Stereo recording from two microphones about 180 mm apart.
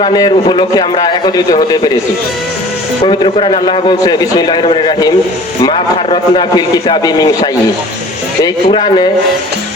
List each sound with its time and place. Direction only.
0.0 s a man's voice: 25° left (ahead or behind)
3.0 s a man's voice: 30° left (ahead or behind)
8.4 s a man's voice: 25° left (ahead or behind)